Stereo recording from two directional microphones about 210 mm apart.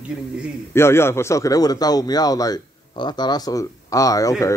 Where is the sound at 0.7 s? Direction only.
10° left (ahead or behind).